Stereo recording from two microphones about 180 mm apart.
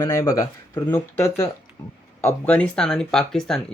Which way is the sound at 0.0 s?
15° left (ahead or behind).